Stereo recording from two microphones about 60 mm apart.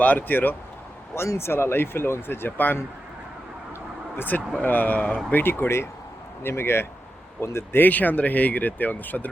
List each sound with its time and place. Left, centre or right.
0.0 s speech: left
1.1 s speech: left
4.2 s speech: left
7.8 s speech: left